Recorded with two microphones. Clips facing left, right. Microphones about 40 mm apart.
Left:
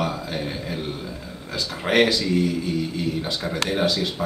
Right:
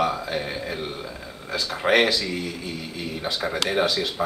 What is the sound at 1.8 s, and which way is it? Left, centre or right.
A man's voice, centre.